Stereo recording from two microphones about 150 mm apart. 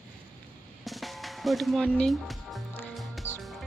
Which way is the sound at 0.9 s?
Centre (ahead or behind).